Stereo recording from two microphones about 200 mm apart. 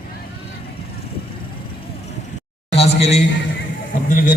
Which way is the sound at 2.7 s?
30° left (ahead or behind).